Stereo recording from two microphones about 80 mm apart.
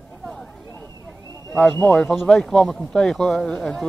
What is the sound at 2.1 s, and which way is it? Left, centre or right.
Speech, centre.